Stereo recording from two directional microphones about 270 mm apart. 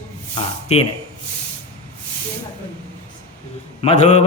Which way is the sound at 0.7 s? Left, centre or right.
Left.